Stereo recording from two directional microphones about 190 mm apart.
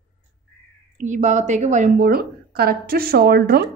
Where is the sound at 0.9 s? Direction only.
40° right (ahead or behind).